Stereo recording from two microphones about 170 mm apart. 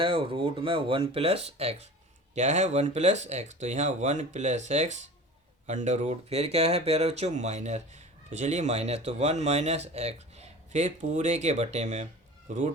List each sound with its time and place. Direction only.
0.0 s speech: 30° right (ahead or behind)